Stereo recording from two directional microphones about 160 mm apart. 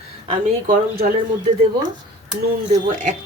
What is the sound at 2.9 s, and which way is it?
Speech, 55° right (ahead or behind).